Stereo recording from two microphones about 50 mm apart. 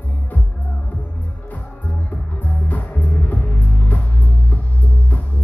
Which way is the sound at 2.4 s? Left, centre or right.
Left.